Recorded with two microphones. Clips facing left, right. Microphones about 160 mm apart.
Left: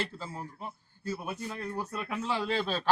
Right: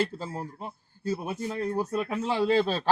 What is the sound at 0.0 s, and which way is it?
Speech, 40° right (ahead or behind).